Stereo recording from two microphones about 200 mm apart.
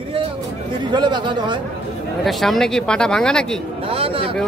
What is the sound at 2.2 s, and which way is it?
Speech, centre (ahead or behind).